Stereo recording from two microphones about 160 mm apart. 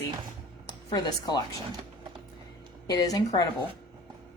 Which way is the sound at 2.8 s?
25° left (ahead or behind).